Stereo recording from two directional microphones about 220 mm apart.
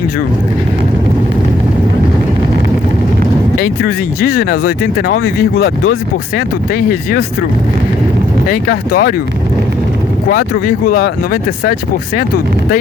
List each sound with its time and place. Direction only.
3.6 s speech: 40° left (ahead or behind)
6.3 s speech: 40° left (ahead or behind)
8.4 s speech: 40° left (ahead or behind)
10.2 s speech: 40° left (ahead or behind)